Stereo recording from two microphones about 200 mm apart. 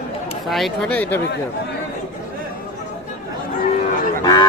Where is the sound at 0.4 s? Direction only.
Centre (ahead or behind).